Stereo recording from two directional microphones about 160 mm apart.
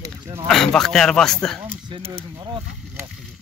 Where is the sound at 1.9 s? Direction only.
30° right (ahead or behind).